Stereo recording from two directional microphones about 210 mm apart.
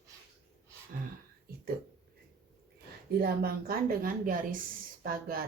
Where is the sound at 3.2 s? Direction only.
45° right (ahead or behind).